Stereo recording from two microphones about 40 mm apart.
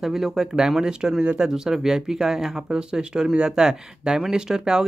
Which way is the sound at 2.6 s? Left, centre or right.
Right.